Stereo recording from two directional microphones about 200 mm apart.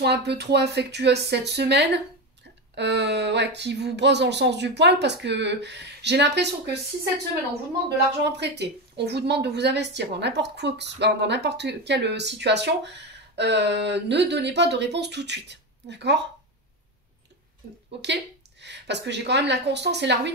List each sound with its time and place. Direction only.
0.0 s speech: 55° right (ahead or behind)
8.2 s speech: 55° right (ahead or behind)
18.0 s speech: 60° right (ahead or behind)